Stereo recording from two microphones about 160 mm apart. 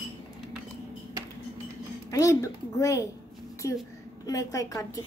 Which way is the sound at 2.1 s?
20° left (ahead or behind).